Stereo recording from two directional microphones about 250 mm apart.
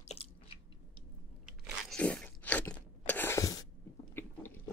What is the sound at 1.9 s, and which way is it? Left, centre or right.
Biting, centre.